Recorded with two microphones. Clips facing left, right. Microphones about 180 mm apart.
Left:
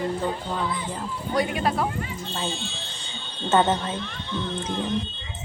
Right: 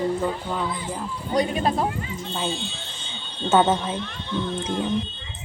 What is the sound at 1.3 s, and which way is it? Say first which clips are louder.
Speech: right 2 dB; 25° right (ahead or behind).